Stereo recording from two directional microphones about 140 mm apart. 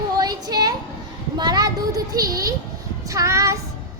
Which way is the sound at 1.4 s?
30° right (ahead or behind).